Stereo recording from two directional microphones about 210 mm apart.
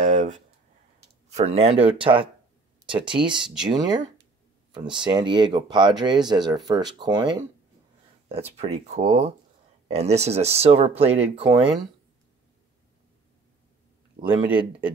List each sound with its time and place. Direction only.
0.0 s a sound: 35° right (ahead or behind)
1.3 s speech: 30° right (ahead or behind)
5.0 s speech: 20° right (ahead or behind)
8.5 s speech: 30° right (ahead or behind)